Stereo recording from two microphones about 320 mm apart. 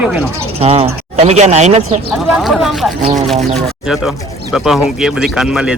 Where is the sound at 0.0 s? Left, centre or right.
Centre.